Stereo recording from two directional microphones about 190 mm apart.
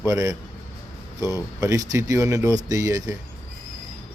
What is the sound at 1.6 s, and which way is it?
A man's voice, 15° right (ahead or behind).